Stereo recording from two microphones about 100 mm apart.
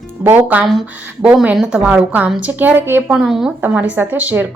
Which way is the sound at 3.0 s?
5° right (ahead or behind).